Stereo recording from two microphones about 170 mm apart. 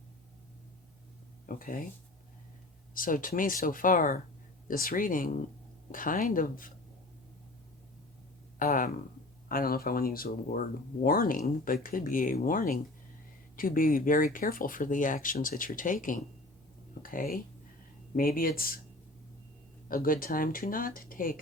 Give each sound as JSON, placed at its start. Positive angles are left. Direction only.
{"t": 1.5, "sound": "speech", "side_deg": 55}
{"t": 2.9, "sound": "speech", "side_deg": 55}
{"t": 8.5, "sound": "speech", "side_deg": 55}
{"t": 19.9, "sound": "speech", "side_deg": 55}